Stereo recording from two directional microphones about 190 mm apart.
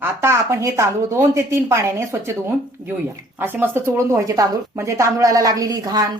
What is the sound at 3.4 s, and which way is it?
Speech, 10° right (ahead or behind).